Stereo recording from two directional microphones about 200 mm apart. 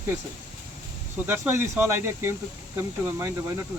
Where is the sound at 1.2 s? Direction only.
10° right (ahead or behind).